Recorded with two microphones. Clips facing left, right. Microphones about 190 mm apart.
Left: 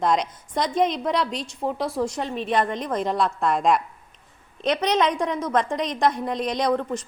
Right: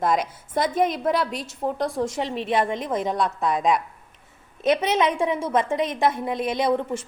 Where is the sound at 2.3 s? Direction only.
20° right (ahead or behind).